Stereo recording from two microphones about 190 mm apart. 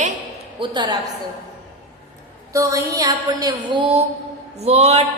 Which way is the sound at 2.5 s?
15° right (ahead or behind).